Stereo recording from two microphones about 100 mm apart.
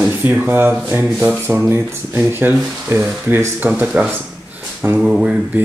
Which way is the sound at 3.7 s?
15° right (ahead or behind).